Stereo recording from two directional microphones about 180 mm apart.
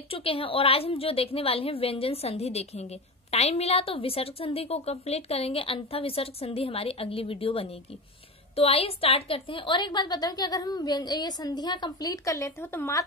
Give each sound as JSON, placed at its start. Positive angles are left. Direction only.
{"t": 0.1, "sound": "a woman's voice", "side_deg": 30}